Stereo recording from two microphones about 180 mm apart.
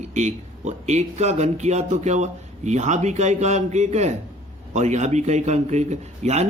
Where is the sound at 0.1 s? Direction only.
40° right (ahead or behind).